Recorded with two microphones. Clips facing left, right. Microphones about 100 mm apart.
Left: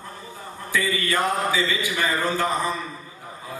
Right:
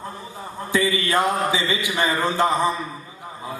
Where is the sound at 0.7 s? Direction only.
20° right (ahead or behind).